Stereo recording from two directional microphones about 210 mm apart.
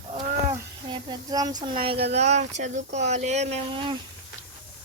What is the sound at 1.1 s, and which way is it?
Speech, 20° right (ahead or behind).